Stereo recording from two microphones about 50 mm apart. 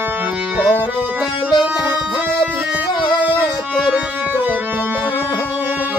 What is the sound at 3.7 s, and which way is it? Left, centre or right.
Music, centre.